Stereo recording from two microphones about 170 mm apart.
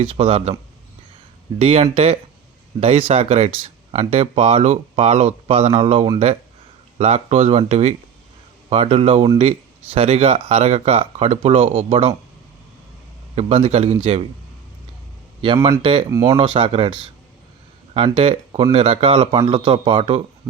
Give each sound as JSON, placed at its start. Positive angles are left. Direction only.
{"t": 0.0, "sound": "speech", "side_deg": -35}
{"t": 1.5, "sound": "speech", "side_deg": -35}
{"t": 13.3, "sound": "speech", "side_deg": -35}
{"t": 15.8, "sound": "speech", "side_deg": -30}